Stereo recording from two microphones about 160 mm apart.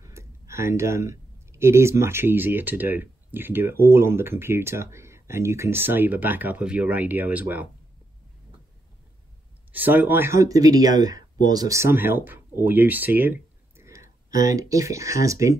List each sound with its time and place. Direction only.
0.0 s speech: 20° right (ahead or behind)
9.7 s speech: 10° right (ahead or behind)